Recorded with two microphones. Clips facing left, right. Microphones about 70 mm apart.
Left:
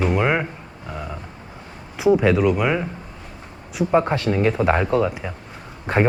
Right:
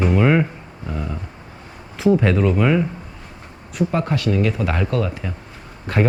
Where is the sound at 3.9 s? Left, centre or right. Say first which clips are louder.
Left 5 dB; left.